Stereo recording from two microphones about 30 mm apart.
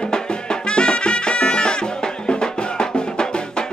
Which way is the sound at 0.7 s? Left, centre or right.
Left.